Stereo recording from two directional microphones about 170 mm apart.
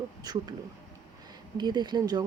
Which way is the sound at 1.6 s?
25° right (ahead or behind).